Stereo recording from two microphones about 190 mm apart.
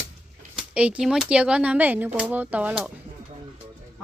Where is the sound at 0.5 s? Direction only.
5° right (ahead or behind).